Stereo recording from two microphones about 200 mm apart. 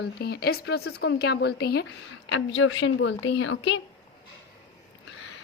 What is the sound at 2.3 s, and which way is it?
A woman's voice, 70° left (ahead or behind).